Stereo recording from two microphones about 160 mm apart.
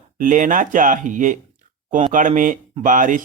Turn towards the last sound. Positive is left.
turn(degrees=-55)  # may be behind; listen again after turning